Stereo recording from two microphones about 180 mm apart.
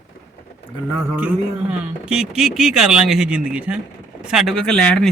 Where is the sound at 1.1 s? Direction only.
5° right (ahead or behind).